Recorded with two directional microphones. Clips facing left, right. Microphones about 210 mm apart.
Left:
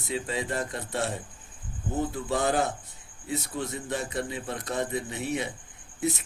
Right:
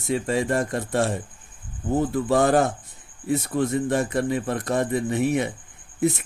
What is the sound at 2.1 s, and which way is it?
A man's voice, 55° right (ahead or behind).